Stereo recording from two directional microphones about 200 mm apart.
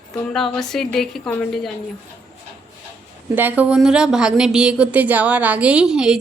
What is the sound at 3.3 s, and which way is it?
A woman's voice, 10° right (ahead or behind).